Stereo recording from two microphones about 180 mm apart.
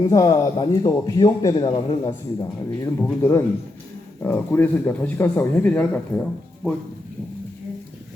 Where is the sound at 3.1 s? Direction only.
15° left (ahead or behind).